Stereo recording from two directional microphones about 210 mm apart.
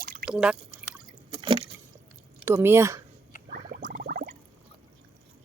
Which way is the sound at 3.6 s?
40° right (ahead or behind).